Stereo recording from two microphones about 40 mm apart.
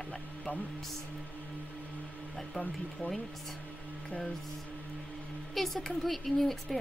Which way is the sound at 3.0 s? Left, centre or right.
Left.